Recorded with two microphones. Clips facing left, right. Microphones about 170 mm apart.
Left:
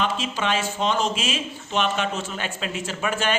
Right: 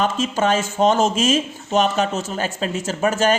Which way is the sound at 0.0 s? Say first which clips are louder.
Right 6 dB; 45° right (ahead or behind).